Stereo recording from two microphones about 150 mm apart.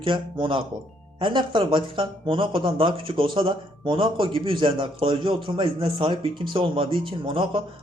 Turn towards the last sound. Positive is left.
turn(degrees=-35)  # may be behind; listen again after turning